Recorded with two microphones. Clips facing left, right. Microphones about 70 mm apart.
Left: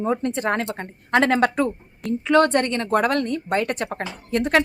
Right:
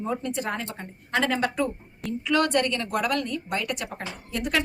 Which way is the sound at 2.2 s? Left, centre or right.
Left.